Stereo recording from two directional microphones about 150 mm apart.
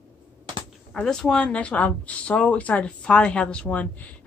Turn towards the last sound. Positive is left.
turn(degrees=10)  # may be behind; listen again after turning